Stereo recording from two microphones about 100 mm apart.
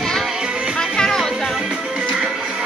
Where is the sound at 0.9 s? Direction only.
5° left (ahead or behind).